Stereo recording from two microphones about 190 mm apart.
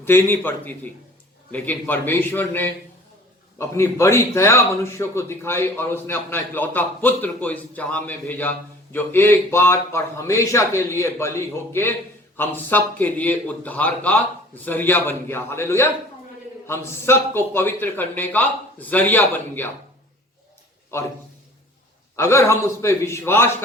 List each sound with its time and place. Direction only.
0.1 s a man's voice: 10° left (ahead or behind)
22.1 s a man's voice: 15° left (ahead or behind)